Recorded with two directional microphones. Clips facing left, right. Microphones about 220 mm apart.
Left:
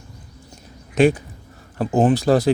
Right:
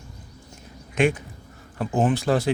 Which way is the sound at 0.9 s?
35° left (ahead or behind).